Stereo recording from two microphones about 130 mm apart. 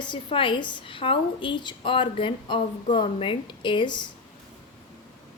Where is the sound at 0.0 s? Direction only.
40° left (ahead or behind).